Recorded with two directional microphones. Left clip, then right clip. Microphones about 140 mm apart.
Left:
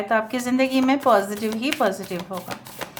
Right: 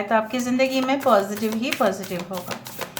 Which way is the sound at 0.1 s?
30° left (ahead or behind).